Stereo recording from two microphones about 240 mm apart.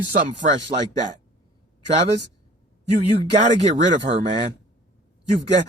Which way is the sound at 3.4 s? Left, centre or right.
Right.